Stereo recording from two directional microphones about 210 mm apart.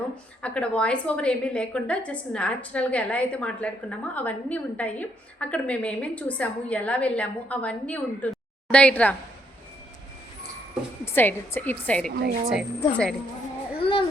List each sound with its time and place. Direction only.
0.4 s a woman's voice: 5° left (ahead or behind)
11.0 s a woman's voice: 10° left (ahead or behind)
12.1 s a woman's voice: 45° right (ahead or behind)
12.5 s a woman's voice: centre (ahead or behind)
13.7 s child singing: 25° left (ahead or behind)